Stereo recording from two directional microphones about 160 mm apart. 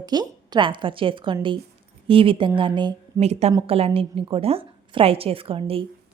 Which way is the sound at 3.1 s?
40° right (ahead or behind).